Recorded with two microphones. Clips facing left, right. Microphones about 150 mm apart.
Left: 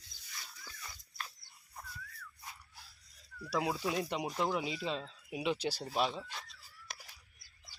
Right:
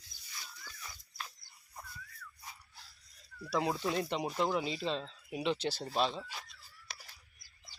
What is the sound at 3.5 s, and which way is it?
Speech, 5° left (ahead or behind).